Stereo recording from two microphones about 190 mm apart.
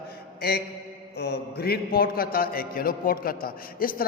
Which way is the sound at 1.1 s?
60° left (ahead or behind).